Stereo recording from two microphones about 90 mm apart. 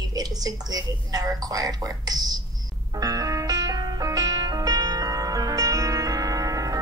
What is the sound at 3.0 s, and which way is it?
Music, 45° right (ahead or behind).